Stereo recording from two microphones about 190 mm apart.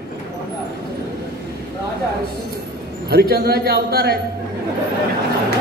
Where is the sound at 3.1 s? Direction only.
55° right (ahead or behind).